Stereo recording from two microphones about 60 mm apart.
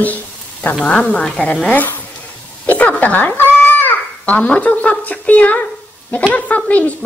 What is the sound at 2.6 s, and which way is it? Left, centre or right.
Babbling, left.